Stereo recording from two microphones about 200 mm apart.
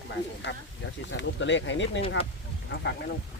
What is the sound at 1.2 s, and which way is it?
Speech, 65° left (ahead or behind).